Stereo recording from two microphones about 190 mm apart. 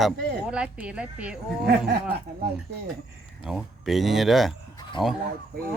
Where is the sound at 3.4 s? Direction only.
Centre (ahead or behind).